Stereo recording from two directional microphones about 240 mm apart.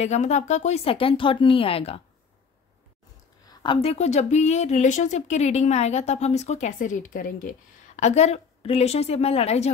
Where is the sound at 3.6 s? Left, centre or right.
Left.